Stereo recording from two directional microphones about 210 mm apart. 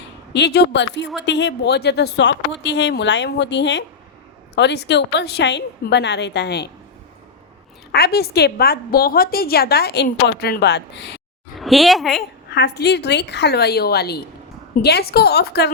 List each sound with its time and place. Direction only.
0.3 s a woman's voice: 55° left (ahead or behind)
7.9 s a woman's voice: 50° left (ahead or behind)
11.5 s a woman's voice: centre (ahead or behind)
12.5 s a woman's voice: 50° left (ahead or behind)